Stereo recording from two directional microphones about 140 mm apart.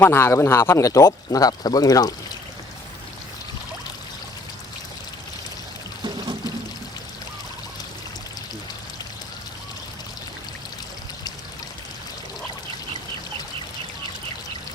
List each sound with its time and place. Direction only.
0.0 s speech: 20° left (ahead or behind)